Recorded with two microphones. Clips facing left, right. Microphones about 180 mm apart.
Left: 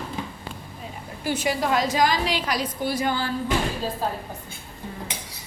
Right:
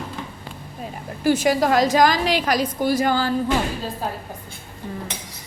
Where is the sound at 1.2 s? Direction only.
45° right (ahead or behind).